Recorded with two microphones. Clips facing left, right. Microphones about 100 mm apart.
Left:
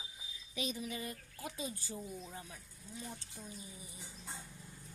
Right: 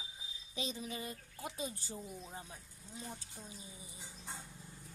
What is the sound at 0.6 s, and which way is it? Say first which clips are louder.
Speech: left 1 dB; 25° right (ahead or behind).